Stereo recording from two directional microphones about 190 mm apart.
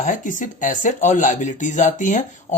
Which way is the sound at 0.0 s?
40° left (ahead or behind).